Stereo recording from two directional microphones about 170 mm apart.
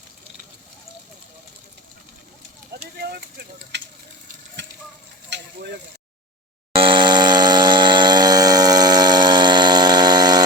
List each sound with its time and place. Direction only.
2.7 s vehicle: 65° right (ahead or behind)
3.7 s sizzle: 90° right
5.3 s speech: 70° right (ahead or behind)
6.7 s a sound: 30° right (ahead or behind)